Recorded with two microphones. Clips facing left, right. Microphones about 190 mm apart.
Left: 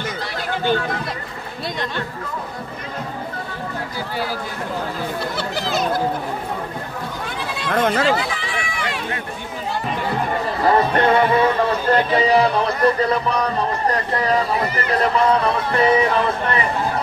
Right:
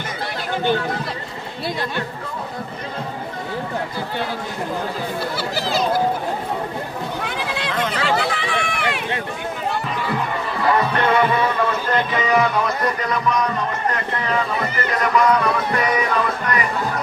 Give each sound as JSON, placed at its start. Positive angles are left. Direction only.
{"t": 7.7, "sound": "speech", "side_deg": 50}
{"t": 8.2, "sound": "run", "side_deg": -65}
{"t": 10.6, "sound": "a man's voice", "side_deg": 35}